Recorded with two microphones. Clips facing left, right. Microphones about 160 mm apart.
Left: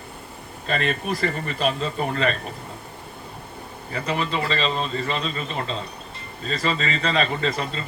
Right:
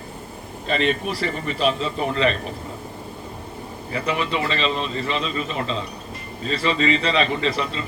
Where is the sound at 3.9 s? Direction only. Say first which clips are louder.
Right 2 dB; 40° left (ahead or behind).